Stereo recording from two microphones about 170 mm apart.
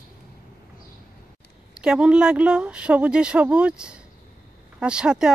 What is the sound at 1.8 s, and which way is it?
Speech, 5° right (ahead or behind).